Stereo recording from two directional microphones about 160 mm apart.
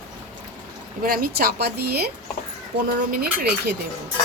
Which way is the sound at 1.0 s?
65° right (ahead or behind).